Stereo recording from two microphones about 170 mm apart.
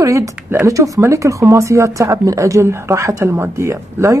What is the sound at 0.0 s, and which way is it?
Speech, 20° right (ahead or behind).